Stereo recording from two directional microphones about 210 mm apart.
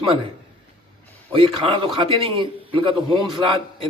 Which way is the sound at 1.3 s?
25° right (ahead or behind).